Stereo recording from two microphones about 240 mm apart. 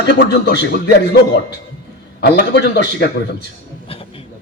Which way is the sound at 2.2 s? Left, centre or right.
Left.